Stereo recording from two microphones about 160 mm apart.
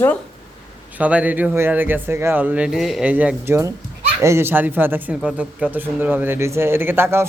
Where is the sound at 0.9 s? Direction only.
10° right (ahead or behind).